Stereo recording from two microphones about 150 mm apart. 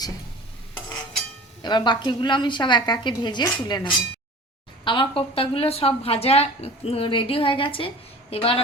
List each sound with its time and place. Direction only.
1.6 s a woman's voice: 30° left (ahead or behind)